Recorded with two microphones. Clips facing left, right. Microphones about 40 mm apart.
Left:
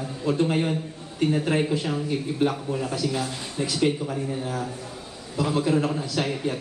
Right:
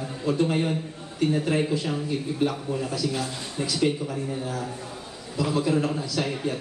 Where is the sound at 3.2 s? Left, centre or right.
Left.